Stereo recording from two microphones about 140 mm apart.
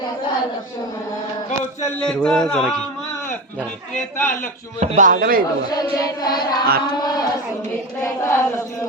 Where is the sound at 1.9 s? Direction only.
5° left (ahead or behind).